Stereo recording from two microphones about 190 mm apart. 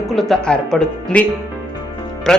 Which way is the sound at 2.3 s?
5° left (ahead or behind).